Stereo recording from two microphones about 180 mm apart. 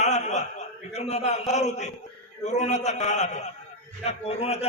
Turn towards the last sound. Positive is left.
turn(degrees=35)  # may be behind; listen again after turning